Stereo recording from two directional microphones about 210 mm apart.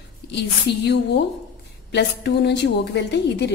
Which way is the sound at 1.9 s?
55° left (ahead or behind).